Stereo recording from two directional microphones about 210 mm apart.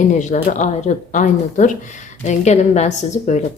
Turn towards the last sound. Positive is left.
turn(degrees=35)  # may be behind; listen again after turning